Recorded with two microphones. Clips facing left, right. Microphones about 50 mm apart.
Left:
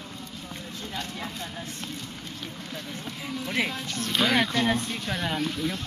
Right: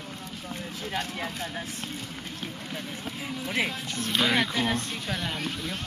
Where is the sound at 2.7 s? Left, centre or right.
Centre.